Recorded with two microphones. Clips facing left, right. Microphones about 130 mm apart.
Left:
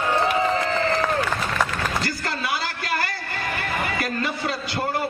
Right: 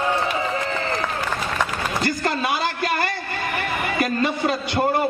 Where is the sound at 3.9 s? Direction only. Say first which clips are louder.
Right 5 dB; 25° right (ahead or behind).